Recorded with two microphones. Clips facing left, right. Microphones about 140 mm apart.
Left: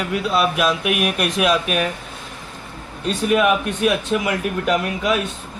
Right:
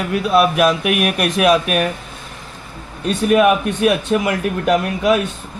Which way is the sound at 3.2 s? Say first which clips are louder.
Right 4 dB; 50° right (ahead or behind).